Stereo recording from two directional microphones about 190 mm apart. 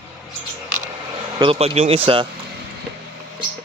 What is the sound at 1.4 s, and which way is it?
Speech, 30° right (ahead or behind).